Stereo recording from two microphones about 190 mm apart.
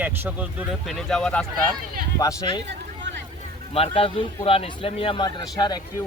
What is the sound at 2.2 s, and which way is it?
Speech, 20° left (ahead or behind).